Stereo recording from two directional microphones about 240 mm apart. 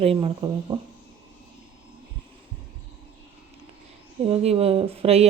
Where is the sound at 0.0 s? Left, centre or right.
Right.